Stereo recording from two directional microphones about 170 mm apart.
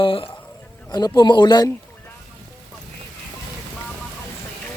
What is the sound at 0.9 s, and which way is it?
Speech, 25° left (ahead or behind).